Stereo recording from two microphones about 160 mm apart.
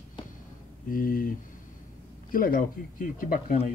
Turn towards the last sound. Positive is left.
turn(degrees=60)  # may be behind; listen again after turning